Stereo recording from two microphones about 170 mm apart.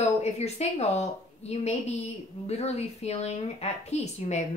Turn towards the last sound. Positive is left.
turn(degrees=40)  # may be behind; listen again after turning